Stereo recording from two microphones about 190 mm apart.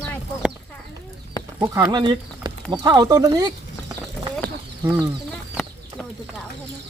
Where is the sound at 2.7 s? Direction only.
20° right (ahead or behind).